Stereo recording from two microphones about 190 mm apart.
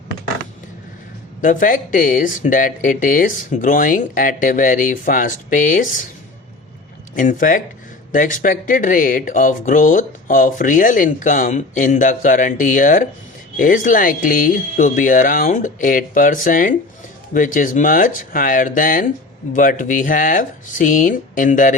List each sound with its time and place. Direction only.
1.4 s speech: 45° left (ahead or behind)
7.2 s speech: 45° left (ahead or behind)